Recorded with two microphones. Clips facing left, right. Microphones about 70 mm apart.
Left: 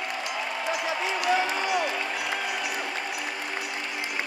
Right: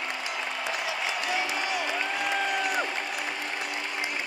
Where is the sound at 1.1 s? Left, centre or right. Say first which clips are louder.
Left 7 dB; left.